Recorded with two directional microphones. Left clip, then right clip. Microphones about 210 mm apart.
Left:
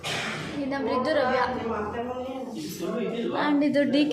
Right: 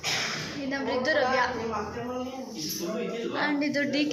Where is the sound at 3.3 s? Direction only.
15° left (ahead or behind).